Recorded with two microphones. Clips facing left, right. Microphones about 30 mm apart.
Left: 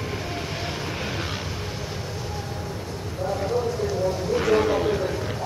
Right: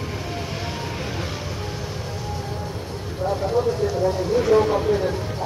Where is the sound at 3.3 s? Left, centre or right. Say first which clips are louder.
Right 3 dB; right.